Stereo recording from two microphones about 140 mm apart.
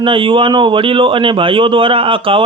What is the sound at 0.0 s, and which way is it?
A man's voice, 35° right (ahead or behind).